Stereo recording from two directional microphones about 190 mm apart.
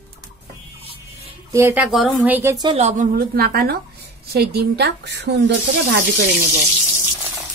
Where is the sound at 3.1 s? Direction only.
55° right (ahead or behind).